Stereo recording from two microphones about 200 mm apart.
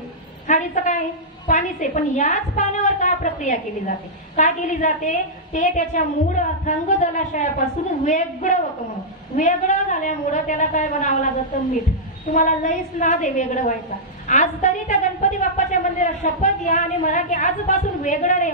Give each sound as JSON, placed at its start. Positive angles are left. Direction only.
{"t": 0.5, "sound": "a woman's voice", "side_deg": 40}
{"t": 12.3, "sound": "a woman's voice", "side_deg": 40}